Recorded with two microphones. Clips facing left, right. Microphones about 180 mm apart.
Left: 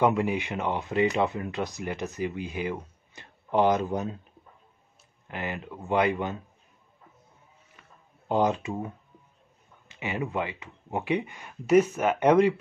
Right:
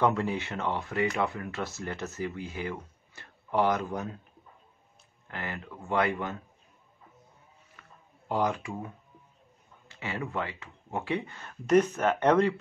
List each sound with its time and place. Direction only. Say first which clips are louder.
0.0 s speech: left 3 dB; 15° left (ahead or behind)
5.3 s speech: left 4 dB; 20° left (ahead or behind)
8.3 s speech: left 4 dB; 20° left (ahead or behind)